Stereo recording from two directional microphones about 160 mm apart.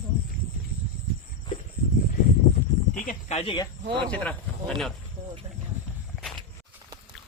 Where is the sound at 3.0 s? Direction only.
40° left (ahead or behind).